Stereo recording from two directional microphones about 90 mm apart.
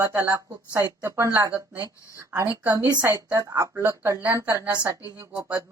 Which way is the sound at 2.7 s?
35° right (ahead or behind).